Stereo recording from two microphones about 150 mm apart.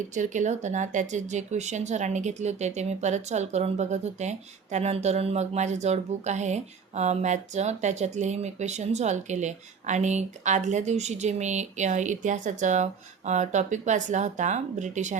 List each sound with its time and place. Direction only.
0.1 s speech: 55° right (ahead or behind)